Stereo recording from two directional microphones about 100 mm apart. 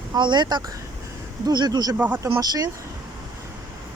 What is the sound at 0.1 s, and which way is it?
A woman's voice, 50° right (ahead or behind).